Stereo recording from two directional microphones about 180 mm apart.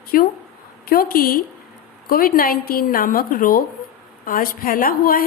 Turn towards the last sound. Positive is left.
turn(degrees=55)  # may be behind; listen again after turning